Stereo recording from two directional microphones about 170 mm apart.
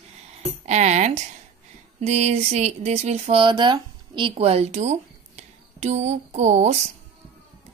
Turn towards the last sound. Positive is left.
turn(degrees=-40)  # may be behind; listen again after turning